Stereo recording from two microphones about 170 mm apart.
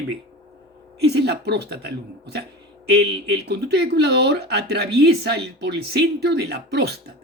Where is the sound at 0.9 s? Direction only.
75° right (ahead or behind).